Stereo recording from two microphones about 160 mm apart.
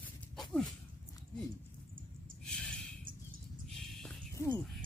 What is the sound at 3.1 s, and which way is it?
Bird, 60° right (ahead or behind).